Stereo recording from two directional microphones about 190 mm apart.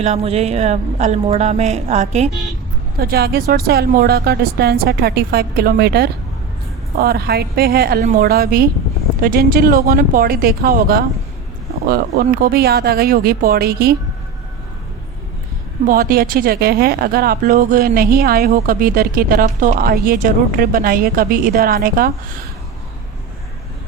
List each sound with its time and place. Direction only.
0.0 s a woman's voice: 35° right (ahead or behind)
3.0 s a woman's voice: 55° right (ahead or behind)
15.9 s a woman's voice: 50° right (ahead or behind)